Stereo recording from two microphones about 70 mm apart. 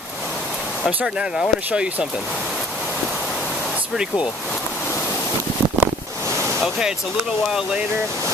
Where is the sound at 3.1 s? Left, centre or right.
Centre.